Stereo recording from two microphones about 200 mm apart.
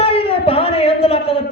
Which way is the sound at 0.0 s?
25° left (ahead or behind).